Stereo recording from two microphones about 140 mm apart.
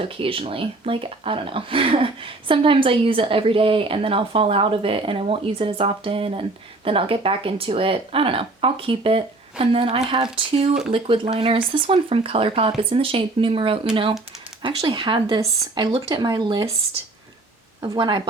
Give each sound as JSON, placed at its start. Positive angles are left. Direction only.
{"t": 0.0, "sound": "speech", "side_deg": -40}
{"t": 17.8, "sound": "speech", "side_deg": -35}